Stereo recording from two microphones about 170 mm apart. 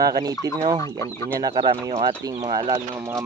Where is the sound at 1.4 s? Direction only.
25° right (ahead or behind).